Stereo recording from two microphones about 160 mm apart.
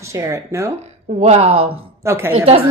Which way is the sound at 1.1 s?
40° right (ahead or behind).